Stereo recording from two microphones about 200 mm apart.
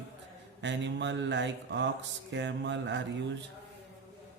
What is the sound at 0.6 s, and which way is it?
Speech, 65° right (ahead or behind).